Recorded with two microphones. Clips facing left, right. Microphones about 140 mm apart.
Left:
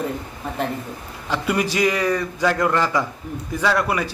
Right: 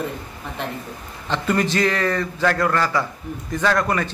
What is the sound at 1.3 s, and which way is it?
A man's voice, 10° left (ahead or behind).